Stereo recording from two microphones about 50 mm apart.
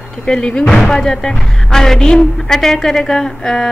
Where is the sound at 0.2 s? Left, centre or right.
Centre.